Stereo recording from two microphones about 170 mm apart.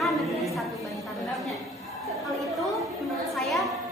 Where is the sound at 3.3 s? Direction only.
Centre (ahead or behind).